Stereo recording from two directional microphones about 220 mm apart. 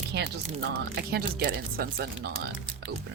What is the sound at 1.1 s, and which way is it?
Speech, 45° right (ahead or behind).